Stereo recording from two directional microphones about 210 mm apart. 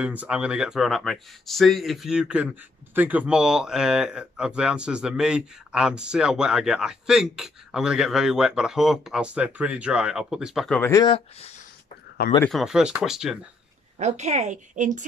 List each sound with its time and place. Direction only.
0.0 s speech: 5° right (ahead or behind)
10.8 s speech: 15° left (ahead or behind)
12.4 s speech: centre (ahead or behind)
13.9 s a woman's voice: 30° right (ahead or behind)